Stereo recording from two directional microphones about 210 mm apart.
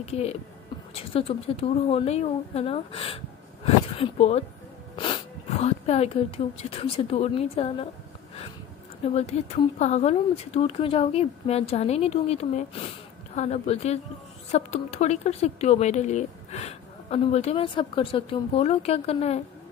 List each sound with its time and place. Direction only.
0.0 s speech: 30° left (ahead or behind)
9.1 s speech: 30° left (ahead or behind)